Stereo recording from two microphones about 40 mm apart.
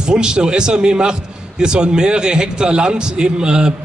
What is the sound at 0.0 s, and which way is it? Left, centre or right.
A man's voice, centre.